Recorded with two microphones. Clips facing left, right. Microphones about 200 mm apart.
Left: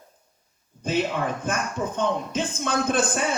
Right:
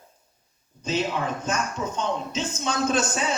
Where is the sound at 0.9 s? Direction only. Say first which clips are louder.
Left 1 dB; 55° left (ahead or behind).